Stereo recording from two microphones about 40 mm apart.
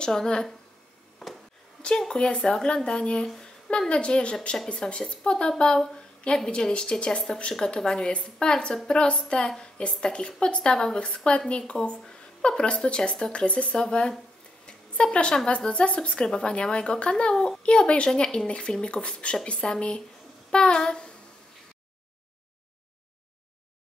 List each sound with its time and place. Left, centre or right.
0.0 s a woman's voice: centre
1.2 s wood: centre
2.1 s a woman's voice: left
3.3 s a sound: centre
3.9 s a woman's voice: left
14.7 s a sound: left
15.3 s a woman's voice: left